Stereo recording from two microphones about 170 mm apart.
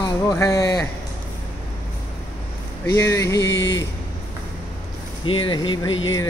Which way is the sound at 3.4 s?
90° left.